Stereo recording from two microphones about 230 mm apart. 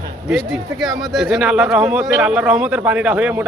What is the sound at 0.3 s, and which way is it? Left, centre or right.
Speech, centre.